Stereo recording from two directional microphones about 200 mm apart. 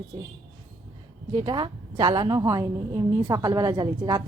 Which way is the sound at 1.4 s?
20° right (ahead or behind).